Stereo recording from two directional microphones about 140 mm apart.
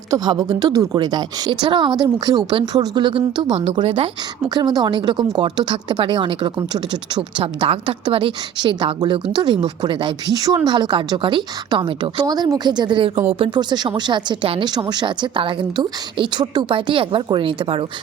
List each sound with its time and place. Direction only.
0.1 s speech: 25° right (ahead or behind)
4.4 s speech: 30° right (ahead or behind)